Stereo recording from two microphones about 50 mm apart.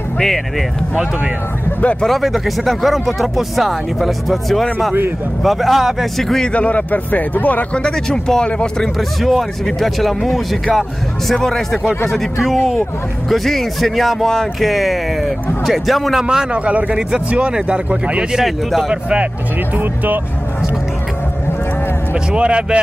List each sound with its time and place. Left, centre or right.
0.2 s speech: centre
2.0 s speech: centre
6.2 s speech: centre
6.5 s a man's voice: left
7.7 s speech: centre
9.2 s a man's voice: centre
16.5 s speech: right
18.3 s speech: centre
18.9 s speech: right
22.1 s speech: right